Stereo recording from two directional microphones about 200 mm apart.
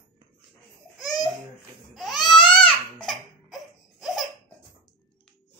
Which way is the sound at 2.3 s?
25° left (ahead or behind).